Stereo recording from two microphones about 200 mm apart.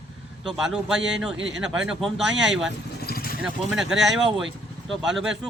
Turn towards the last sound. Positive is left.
turn(degrees=0)  # may be behind; listen again after turning